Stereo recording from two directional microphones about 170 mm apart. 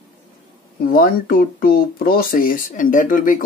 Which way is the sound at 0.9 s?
55° left (ahead or behind).